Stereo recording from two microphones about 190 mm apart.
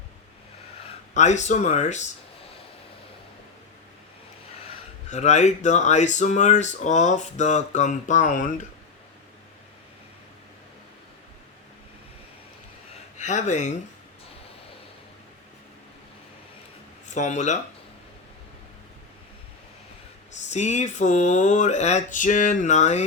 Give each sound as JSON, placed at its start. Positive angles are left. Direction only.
{"t": 1.1, "sound": "speech", "side_deg": 40}
{"t": 5.1, "sound": "speech", "side_deg": 35}
{"t": 13.1, "sound": "speech", "side_deg": 40}
{"t": 17.1, "sound": "speech", "side_deg": 40}
{"t": 20.3, "sound": "speech", "side_deg": 35}